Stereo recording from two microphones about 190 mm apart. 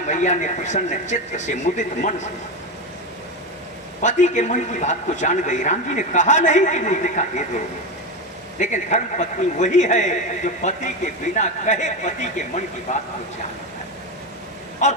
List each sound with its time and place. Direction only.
0.1 s a man's voice: 40° left (ahead or behind)
4.0 s a man's voice: 40° left (ahead or behind)
8.5 s a man's voice: 40° left (ahead or behind)
14.8 s a man's voice: 40° left (ahead or behind)